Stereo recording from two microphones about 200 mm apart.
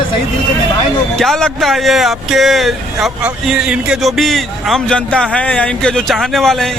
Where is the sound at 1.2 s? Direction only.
Centre (ahead or behind).